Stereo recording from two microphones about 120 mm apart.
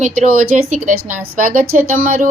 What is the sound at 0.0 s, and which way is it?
Speech, 90° right.